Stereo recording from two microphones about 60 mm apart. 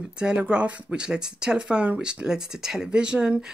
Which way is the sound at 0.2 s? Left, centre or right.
Centre.